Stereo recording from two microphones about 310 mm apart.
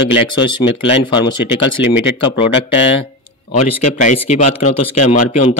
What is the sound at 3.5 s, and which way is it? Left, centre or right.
Speech, left.